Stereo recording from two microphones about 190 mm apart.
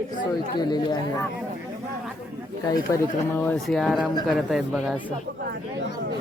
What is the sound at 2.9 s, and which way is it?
Speech, 10° left (ahead or behind).